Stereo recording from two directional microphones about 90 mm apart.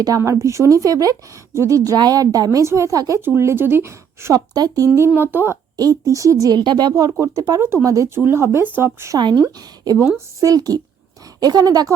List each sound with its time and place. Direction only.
0.2 s speech: 35° right (ahead or behind)
3.2 s speech: 25° right (ahead or behind)
4.4 s speech: 45° right (ahead or behind)
4.9 s speech: 25° right (ahead or behind)
5.7 s speech: 40° right (ahead or behind)
6.6 s speech: 55° right (ahead or behind)
7.6 s speech: 30° right (ahead or behind)
9.1 s speech: 55° right (ahead or behind)
10.4 s speech: 45° right (ahead or behind)